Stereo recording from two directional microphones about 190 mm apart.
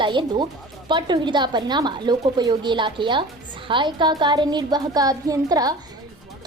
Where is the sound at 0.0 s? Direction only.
25° right (ahead or behind).